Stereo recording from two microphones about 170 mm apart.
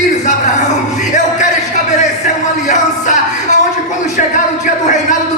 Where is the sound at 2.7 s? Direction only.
45° left (ahead or behind).